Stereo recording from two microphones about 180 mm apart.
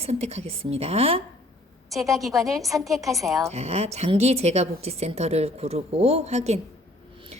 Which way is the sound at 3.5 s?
35° right (ahead or behind).